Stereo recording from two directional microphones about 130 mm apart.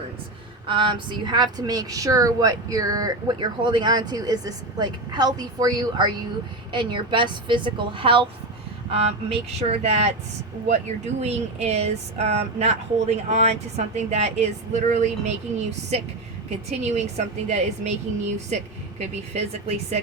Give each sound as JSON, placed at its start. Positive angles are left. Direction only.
{"t": 0.7, "sound": "speech", "side_deg": -40}
{"t": 15.9, "sound": "speech", "side_deg": -50}
{"t": 18.9, "sound": "speech", "side_deg": -60}